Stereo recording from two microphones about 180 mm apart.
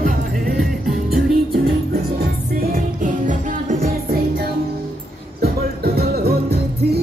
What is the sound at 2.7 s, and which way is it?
Music, 45° right (ahead or behind).